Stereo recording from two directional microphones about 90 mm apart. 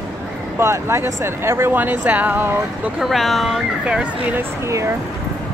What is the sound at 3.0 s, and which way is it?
Speech, centre (ahead or behind).